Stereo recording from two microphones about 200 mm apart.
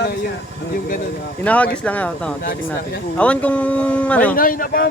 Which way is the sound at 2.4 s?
45° left (ahead or behind).